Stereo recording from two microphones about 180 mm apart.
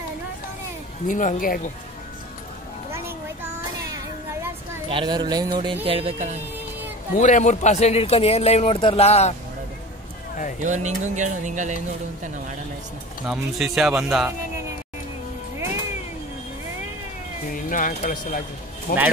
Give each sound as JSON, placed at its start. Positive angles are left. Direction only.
{"t": 1.0, "sound": "speech", "side_deg": 45}
{"t": 3.8, "sound": "music", "side_deg": -20}
{"t": 4.8, "sound": "speech", "side_deg": -25}
{"t": 7.2, "sound": "speech", "side_deg": 40}
{"t": 10.6, "sound": "speech", "side_deg": -45}
{"t": 13.3, "sound": "speech", "side_deg": 0}
{"t": 17.5, "sound": "speech", "side_deg": 50}